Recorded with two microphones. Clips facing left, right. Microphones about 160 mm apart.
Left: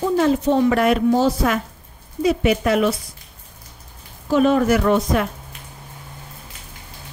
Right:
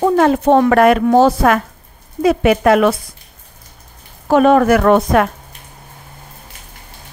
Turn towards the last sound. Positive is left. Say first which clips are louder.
# right 6 dB
turn(degrees=-65)  # may be behind; listen again after turning